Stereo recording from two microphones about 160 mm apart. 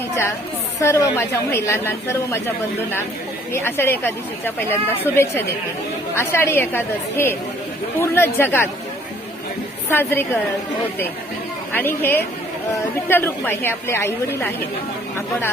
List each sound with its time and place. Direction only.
0.8 s a woman's voice: 20° left (ahead or behind)
3.5 s a woman's voice: 15° left (ahead or behind)
9.9 s a woman's voice: 15° left (ahead or behind)
11.7 s a woman's voice: 15° left (ahead or behind)